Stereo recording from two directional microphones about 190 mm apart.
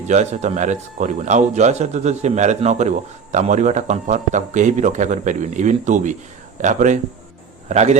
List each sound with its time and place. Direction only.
0.1 s speech: 35° right (ahead or behind)